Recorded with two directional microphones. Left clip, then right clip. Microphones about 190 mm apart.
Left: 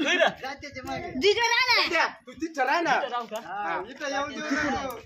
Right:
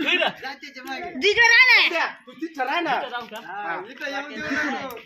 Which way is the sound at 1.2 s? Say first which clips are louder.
Right 7 dB; 70° left (ahead or behind).